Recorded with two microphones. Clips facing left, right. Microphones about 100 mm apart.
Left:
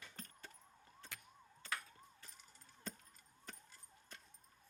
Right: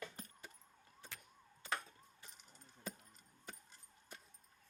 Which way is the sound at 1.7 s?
20° right (ahead or behind).